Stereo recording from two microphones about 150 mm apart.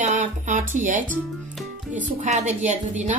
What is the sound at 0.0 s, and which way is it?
Music, 55° right (ahead or behind).